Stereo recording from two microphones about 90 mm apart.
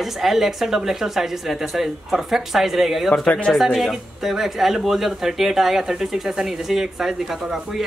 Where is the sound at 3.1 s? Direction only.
15° left (ahead or behind).